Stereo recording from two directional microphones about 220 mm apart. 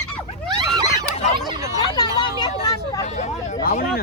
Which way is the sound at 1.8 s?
15° left (ahead or behind).